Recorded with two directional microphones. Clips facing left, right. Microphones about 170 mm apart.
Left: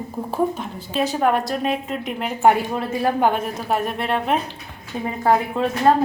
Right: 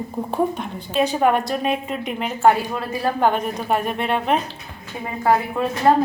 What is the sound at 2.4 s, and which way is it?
Speech, 20° left (ahead or behind).